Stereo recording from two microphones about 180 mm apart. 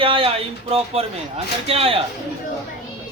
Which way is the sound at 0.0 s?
30° right (ahead or behind).